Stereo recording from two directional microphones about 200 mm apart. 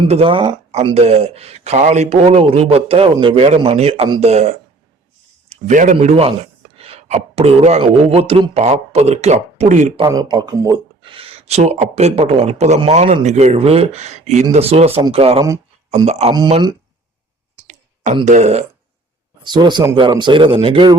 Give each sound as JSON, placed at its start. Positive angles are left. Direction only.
{"t": 0.1, "sound": "speech", "side_deg": -25}
{"t": 10.0, "sound": "speech", "side_deg": -20}
{"t": 16.3, "sound": "speech", "side_deg": -20}
{"t": 18.3, "sound": "speech", "side_deg": -35}
{"t": 19.4, "sound": "speech", "side_deg": -20}